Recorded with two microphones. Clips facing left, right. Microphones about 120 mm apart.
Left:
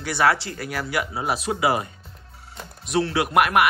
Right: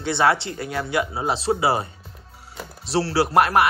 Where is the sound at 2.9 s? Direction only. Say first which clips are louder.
Right 1 dB; 30° right (ahead or behind).